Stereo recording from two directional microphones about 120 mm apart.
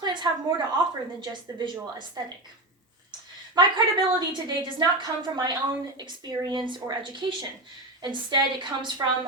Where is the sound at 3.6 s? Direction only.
35° right (ahead or behind).